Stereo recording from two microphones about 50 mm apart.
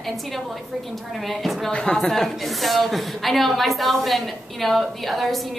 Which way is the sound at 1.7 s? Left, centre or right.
Centre.